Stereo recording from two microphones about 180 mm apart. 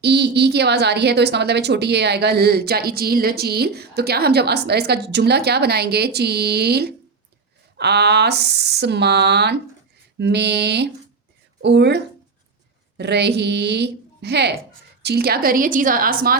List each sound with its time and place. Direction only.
0.0 s a woman's voice: 65° right (ahead or behind)